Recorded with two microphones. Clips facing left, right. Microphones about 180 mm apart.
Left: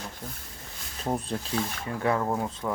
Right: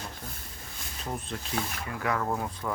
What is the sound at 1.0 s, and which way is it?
Speech, 35° left (ahead or behind).